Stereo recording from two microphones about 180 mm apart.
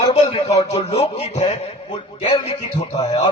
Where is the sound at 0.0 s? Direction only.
30° left (ahead or behind).